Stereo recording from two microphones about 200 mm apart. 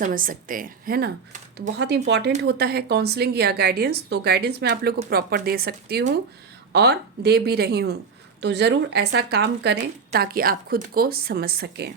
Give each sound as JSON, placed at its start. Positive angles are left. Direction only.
{"t": 0.0, "sound": "a woman's voice", "side_deg": -45}